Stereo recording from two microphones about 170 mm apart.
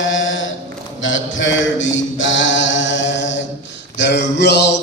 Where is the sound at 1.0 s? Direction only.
90° left.